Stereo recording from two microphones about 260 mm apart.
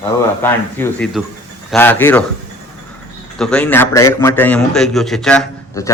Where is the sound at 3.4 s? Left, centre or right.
Centre.